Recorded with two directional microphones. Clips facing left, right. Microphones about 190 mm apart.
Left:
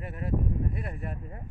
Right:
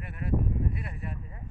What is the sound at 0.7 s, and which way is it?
Speech, 45° left (ahead or behind).